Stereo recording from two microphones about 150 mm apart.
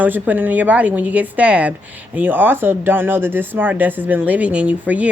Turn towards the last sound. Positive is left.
turn(degrees=-10)  # may be behind; listen again after turning